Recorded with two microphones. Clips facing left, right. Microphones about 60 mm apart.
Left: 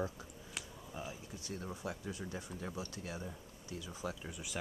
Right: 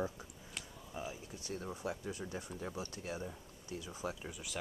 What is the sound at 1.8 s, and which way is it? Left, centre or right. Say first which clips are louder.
Speech: right 2 dB; right.